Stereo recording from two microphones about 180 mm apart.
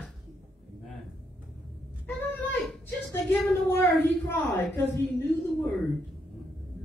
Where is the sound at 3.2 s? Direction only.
10° left (ahead or behind).